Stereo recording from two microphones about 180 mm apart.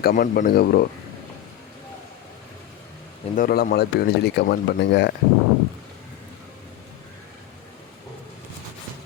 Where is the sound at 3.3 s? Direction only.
55° left (ahead or behind).